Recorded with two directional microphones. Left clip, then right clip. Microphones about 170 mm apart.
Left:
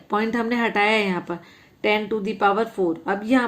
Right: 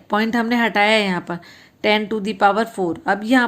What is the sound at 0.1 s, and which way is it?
A woman's voice, 40° right (ahead or behind).